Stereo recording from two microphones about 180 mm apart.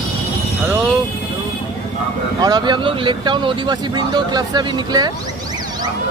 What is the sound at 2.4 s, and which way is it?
Speech, 25° right (ahead or behind).